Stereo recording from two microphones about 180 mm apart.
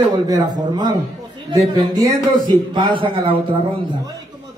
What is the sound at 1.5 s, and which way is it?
Speech, 20° right (ahead or behind).